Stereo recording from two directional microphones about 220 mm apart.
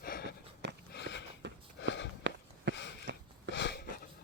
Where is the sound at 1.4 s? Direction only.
55° right (ahead or behind).